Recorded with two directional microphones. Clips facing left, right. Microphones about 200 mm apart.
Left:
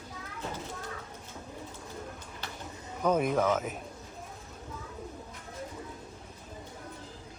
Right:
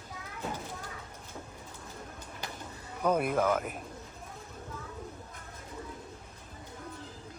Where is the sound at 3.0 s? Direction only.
5° right (ahead or behind).